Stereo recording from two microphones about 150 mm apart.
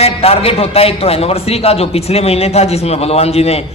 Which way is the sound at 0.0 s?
40° left (ahead or behind).